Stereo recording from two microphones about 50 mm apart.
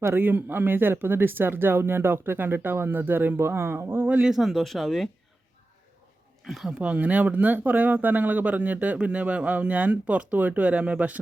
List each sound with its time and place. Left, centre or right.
0.1 s speech: right
3.4 s speech: right
4.2 s speech: centre
4.4 s speech: centre
6.4 s speech: centre
6.7 s speech: right